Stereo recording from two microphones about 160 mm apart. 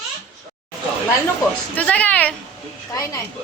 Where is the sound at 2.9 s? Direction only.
20° left (ahead or behind).